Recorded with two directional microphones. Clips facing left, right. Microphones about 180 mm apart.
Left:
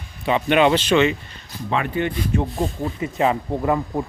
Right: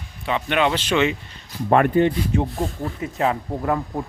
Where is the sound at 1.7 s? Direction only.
50° right (ahead or behind).